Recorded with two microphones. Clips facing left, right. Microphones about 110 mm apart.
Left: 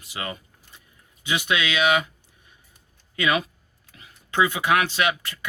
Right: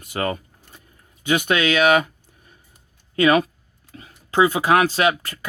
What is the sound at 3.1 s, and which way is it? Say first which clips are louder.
Speech: right 7 dB; 45° right (ahead or behind).